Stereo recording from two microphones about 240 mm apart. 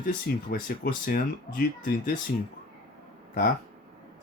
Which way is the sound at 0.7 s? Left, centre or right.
Left.